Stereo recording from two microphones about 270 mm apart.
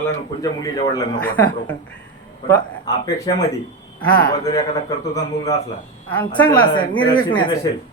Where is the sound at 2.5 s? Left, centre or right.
Centre.